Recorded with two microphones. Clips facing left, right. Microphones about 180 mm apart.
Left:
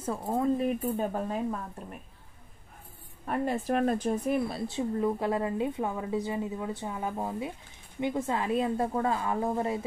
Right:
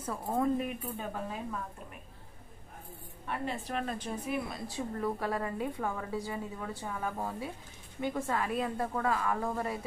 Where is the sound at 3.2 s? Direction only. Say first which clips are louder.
Left 7 dB; 45° left (ahead or behind).